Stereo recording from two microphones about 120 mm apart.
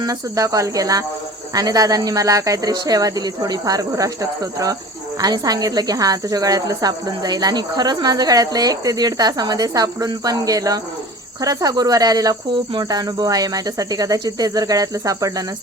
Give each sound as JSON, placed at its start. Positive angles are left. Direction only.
{"t": 0.0, "sound": "cricket", "side_deg": -30}
{"t": 1.5, "sound": "speech", "side_deg": -30}